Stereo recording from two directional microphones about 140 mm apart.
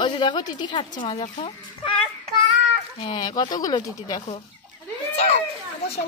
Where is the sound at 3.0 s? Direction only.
30° left (ahead or behind).